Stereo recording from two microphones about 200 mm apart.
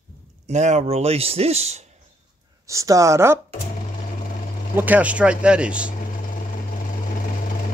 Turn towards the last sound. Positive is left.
turn(degrees=-5)  # may be behind; listen again after turning